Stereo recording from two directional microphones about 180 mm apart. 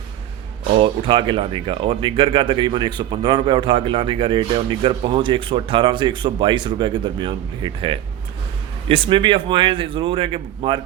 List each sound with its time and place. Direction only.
0.8 s speech: 30° right (ahead or behind)